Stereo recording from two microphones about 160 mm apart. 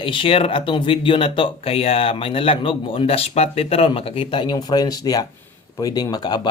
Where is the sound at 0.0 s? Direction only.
35° left (ahead or behind).